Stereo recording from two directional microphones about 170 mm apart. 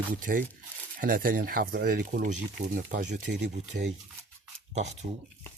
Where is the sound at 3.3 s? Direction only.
65° right (ahead or behind).